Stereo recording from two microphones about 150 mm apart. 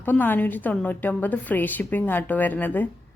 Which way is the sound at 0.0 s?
10° left (ahead or behind).